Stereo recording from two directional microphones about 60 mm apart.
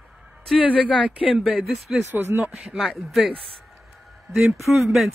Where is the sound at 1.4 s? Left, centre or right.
Centre.